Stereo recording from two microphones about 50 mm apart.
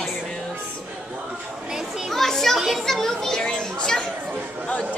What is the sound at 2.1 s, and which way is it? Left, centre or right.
A child's voice, centre.